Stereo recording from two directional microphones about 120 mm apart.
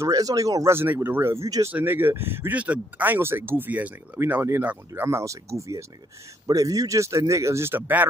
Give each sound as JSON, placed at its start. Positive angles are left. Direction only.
{"t": 0.0, "sound": "speech", "side_deg": -30}